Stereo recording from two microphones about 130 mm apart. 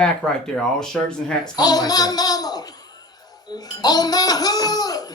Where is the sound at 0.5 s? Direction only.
5° left (ahead or behind).